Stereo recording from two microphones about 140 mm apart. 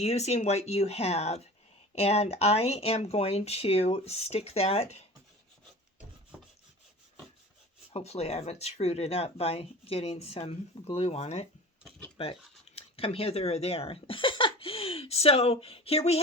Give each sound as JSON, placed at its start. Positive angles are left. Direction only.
{"t": 0.0, "sound": "speech", "side_deg": 50}
{"t": 7.9, "sound": "speech", "side_deg": 50}
{"t": 12.1, "sound": "speech", "side_deg": 40}